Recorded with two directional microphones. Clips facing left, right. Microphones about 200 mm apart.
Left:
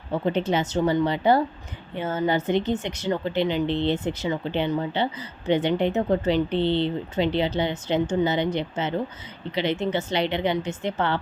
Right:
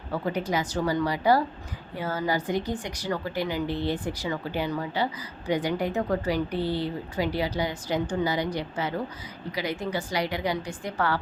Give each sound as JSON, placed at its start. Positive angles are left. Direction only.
{"t": 0.1, "sound": "speech", "side_deg": 25}